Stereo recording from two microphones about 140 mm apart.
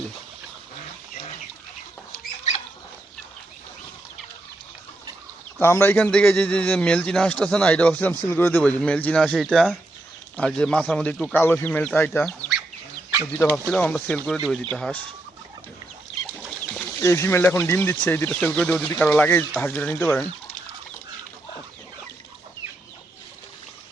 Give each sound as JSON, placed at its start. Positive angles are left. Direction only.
{"t": 2.1, "sound": "rodents", "side_deg": 50}
{"t": 5.5, "sound": "a man's voice", "side_deg": 15}
{"t": 13.7, "sound": "a man's voice", "side_deg": 10}
{"t": 16.4, "sound": "chicken", "side_deg": 5}
{"t": 17.0, "sound": "a man's voice", "side_deg": 20}